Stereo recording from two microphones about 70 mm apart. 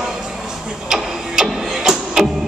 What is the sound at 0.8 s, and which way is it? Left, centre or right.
Music, centre.